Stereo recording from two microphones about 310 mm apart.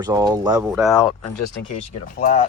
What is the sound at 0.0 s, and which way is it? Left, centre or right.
Speech, centre.